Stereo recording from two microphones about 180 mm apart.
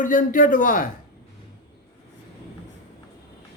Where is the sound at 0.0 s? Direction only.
50° left (ahead or behind).